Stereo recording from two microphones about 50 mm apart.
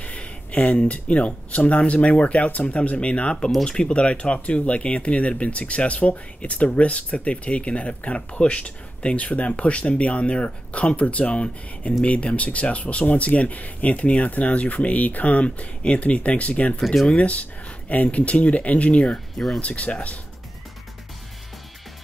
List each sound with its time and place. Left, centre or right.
0.0 s speech: left
16.8 s speech: centre
17.1 s speech: left
19.1 s speech: centre
19.6 s speech: left